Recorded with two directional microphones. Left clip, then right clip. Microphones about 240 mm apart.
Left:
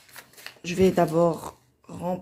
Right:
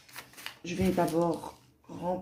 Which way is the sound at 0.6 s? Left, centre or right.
Left.